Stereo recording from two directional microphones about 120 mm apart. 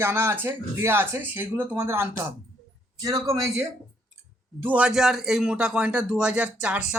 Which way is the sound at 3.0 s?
30° right (ahead or behind).